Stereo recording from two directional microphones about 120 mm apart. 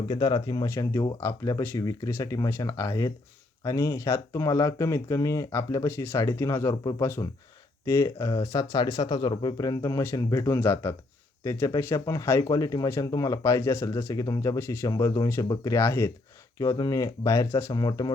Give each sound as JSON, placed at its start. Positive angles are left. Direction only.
{"t": 0.1, "sound": "speech", "side_deg": 35}
{"t": 0.7, "sound": "speech", "side_deg": 20}